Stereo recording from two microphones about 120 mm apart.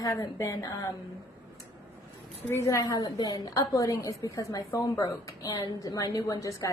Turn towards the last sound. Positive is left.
turn(degrees=25)  # may be behind; listen again after turning